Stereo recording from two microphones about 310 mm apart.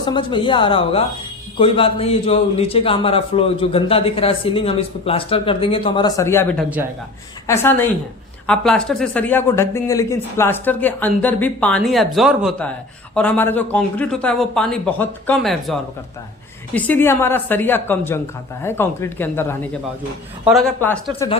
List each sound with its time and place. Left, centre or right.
0.0 s a man's voice: centre